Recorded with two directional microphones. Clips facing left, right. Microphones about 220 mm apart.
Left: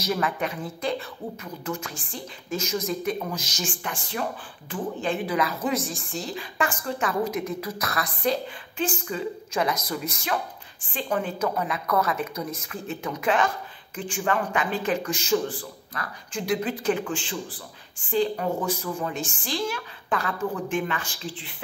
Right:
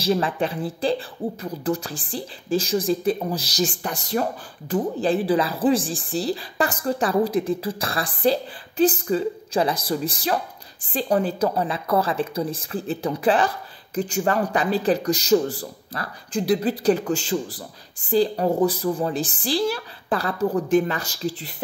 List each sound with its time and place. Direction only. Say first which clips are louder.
0.0 s speech: right 5 dB; 30° right (ahead or behind)